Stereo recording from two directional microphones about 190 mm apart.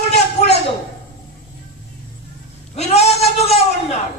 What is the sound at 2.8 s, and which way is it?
Speech, 35° left (ahead or behind).